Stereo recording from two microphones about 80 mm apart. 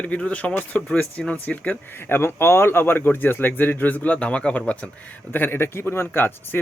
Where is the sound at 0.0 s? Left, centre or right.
Centre.